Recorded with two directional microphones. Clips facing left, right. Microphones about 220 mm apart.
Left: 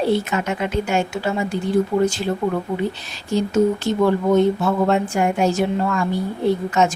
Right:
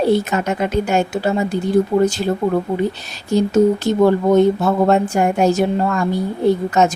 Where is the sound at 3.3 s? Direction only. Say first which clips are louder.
Right 4 dB; 40° right (ahead or behind).